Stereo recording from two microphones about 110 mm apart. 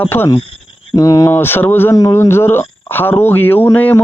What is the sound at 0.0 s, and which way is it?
Speech, 20° left (ahead or behind).